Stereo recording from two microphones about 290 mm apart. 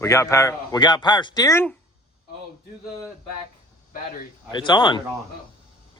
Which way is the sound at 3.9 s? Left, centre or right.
Left.